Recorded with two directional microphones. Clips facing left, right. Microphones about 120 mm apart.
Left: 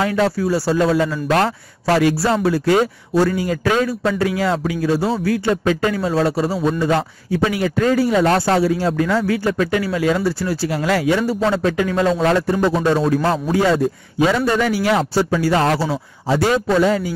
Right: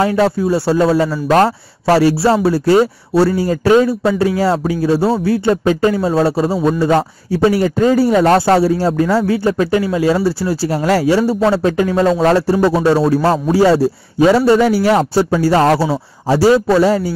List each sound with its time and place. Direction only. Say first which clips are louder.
0.0 s a man's voice: right 4 dB; 30° right (ahead or behind)
12.5 s speech: right 4 dB; 5° right (ahead or behind)
12.9 s speech: right 4 dB; 35° right (ahead or behind)